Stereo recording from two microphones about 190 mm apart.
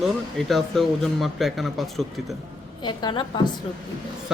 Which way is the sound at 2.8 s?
25° left (ahead or behind).